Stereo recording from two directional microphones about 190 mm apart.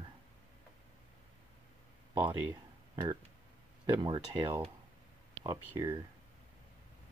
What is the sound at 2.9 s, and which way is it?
Speech, 15° right (ahead or behind).